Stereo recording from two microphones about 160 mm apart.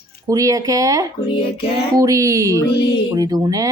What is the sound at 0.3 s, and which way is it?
Speech, 20° right (ahead or behind).